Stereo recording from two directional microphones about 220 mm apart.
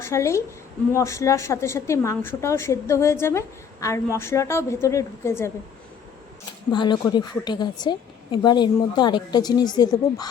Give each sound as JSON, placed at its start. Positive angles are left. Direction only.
{"t": 0.0, "sound": "a woman's voice", "side_deg": 15}
{"t": 6.7, "sound": "a woman's voice", "side_deg": 20}